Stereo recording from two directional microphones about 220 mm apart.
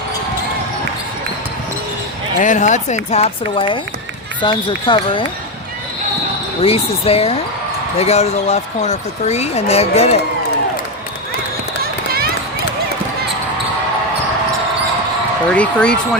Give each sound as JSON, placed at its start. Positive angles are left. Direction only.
{"t": 2.4, "sound": "speech", "side_deg": 35}
{"t": 6.6, "sound": "speech", "side_deg": 25}
{"t": 15.4, "sound": "speech", "side_deg": 5}